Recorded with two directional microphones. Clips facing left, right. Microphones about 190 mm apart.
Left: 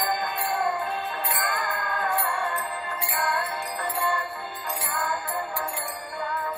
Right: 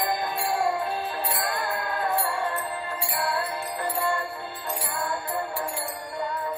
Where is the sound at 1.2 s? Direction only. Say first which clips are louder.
Right 1 dB; 35° right (ahead or behind).